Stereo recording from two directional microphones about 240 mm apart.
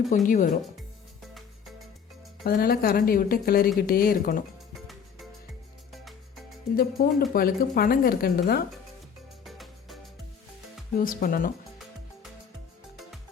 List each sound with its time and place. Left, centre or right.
0.3 s speech: left
1.3 s music: centre
2.4 s speech: left
5.9 s music: centre
6.7 s speech: left
9.4 s music: centre
10.9 s speech: left